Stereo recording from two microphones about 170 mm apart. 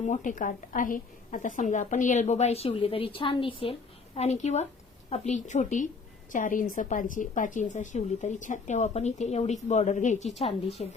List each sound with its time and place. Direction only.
0.0 s a woman's voice: 50° left (ahead or behind)